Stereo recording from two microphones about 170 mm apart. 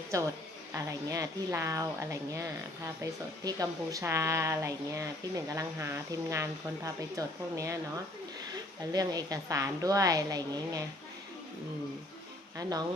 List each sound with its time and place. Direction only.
0.1 s a woman's voice: 20° right (ahead or behind)
8.8 s speech: 20° right (ahead or behind)